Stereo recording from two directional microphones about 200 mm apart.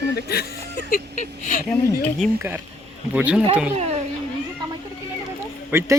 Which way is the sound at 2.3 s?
10° right (ahead or behind).